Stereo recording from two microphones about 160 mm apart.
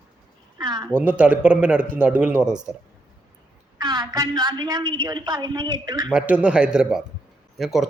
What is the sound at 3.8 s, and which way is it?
A woman's voice, 25° right (ahead or behind).